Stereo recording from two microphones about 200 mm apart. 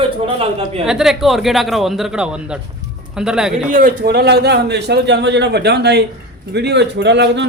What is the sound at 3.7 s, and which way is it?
A man's voice, 40° right (ahead or behind).